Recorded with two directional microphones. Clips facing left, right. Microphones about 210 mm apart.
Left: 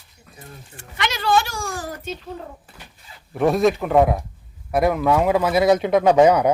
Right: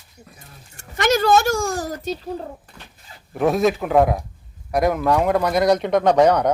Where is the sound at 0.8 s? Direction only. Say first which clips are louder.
Right 9 dB; 45° right (ahead or behind).